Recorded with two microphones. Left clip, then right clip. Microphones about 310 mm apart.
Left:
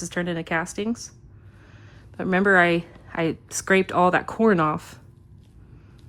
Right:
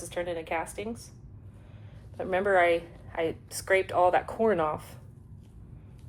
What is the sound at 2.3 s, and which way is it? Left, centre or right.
A woman's voice, left.